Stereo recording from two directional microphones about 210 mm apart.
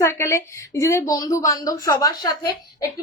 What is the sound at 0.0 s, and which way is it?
A woman's voice, 10° left (ahead or behind).